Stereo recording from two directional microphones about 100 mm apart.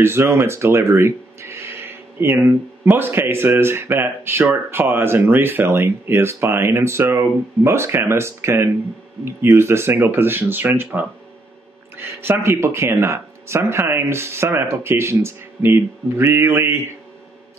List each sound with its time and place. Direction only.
0.0 s speech: 25° right (ahead or behind)
12.2 s speech: 25° right (ahead or behind)